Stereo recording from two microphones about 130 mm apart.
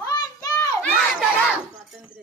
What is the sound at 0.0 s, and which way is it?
Children playing, 30° left (ahead or behind).